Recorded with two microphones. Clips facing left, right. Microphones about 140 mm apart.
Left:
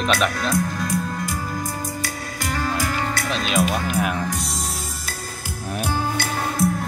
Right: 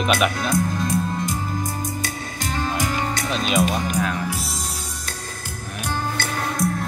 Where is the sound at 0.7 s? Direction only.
25° right (ahead or behind).